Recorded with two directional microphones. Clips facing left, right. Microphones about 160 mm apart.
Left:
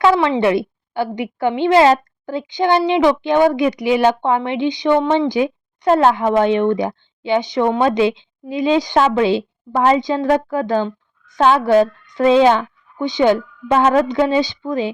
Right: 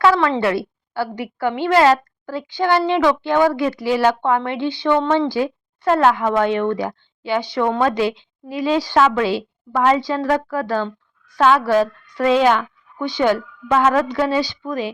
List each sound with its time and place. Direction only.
0.0 s a woman's voice: 20° left (ahead or behind)